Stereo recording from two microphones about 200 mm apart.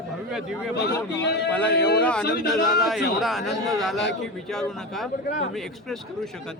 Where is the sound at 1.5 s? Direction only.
5° left (ahead or behind).